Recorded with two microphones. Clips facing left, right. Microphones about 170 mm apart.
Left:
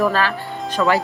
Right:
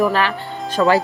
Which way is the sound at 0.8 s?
30° right (ahead or behind).